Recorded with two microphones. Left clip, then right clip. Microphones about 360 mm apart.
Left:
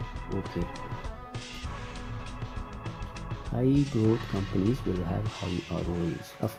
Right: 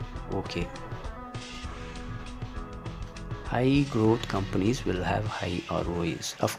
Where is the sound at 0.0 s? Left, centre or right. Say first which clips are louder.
Right 2 dB; centre.